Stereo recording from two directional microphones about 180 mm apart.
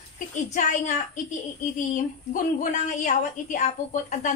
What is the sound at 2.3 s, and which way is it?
A woman's voice, 45° left (ahead or behind).